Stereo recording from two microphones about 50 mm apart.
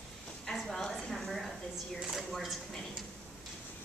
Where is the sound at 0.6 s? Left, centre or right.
Centre.